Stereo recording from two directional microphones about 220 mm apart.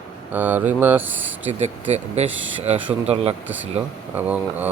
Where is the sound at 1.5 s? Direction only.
30° right (ahead or behind).